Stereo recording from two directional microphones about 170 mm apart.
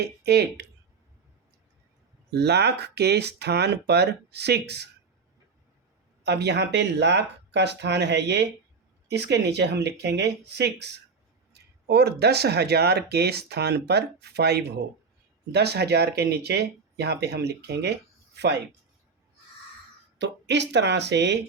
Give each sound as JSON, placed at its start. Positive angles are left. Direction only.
{"t": 0.0, "sound": "speech", "side_deg": -75}
{"t": 2.3, "sound": "speech", "side_deg": -75}
{"t": 6.2, "sound": "speech", "side_deg": -85}
{"t": 9.0, "sound": "speech", "side_deg": -80}
{"t": 20.1, "sound": "speech", "side_deg": -90}